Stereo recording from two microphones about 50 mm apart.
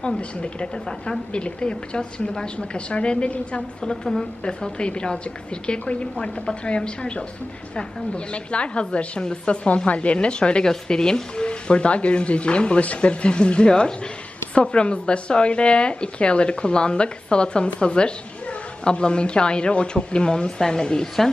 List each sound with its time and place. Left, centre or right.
0.4 s speech: left
3.8 s a woman's voice: centre
8.3 s speech: left